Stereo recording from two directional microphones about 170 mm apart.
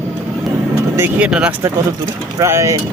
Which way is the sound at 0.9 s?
15° right (ahead or behind).